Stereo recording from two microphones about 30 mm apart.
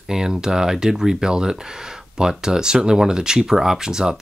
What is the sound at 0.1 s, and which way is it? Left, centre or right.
Speech, right.